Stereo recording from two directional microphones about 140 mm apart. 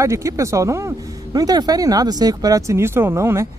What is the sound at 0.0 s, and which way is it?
Speech, 20° right (ahead or behind).